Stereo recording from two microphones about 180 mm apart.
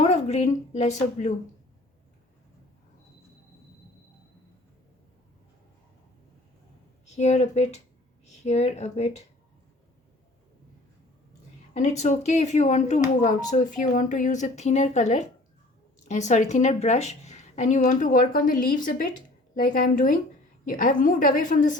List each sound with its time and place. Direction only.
0.0 s a woman's voice: 35° left (ahead or behind)
7.0 s speech: 40° left (ahead or behind)
11.7 s a woman's voice: 40° left (ahead or behind)